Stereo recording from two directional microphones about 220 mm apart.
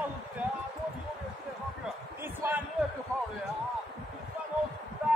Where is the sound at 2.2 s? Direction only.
10° right (ahead or behind).